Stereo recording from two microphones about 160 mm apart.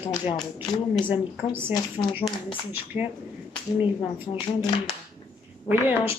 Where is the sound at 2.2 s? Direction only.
30° left (ahead or behind).